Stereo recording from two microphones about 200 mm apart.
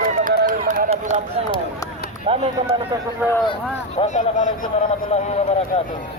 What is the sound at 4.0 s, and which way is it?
Speech, 40° left (ahead or behind).